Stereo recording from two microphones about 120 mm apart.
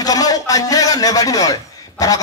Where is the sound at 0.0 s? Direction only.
30° left (ahead or behind).